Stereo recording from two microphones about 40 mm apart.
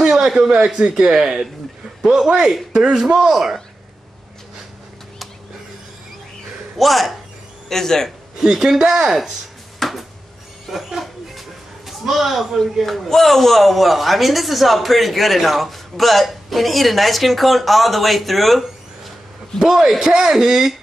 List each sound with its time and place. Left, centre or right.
0.0 s a sound: centre
0.5 s a man's voice: right
6.8 s speech: centre
7.7 s a man's voice: centre
8.4 s speech: centre
9.8 s a sound: centre
10.7 s speech: centre
19.7 s speech: centre